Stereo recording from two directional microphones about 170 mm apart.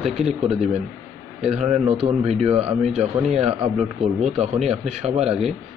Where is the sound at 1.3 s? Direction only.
40° right (ahead or behind).